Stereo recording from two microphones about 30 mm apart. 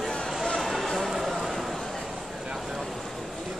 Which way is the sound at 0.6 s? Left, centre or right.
Centre.